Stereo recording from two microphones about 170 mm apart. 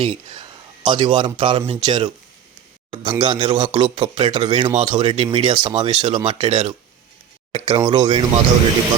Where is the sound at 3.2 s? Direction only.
25° right (ahead or behind).